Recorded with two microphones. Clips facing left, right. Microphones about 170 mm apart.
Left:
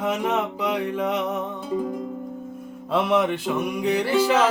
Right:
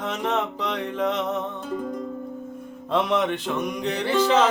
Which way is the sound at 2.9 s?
5° left (ahead or behind).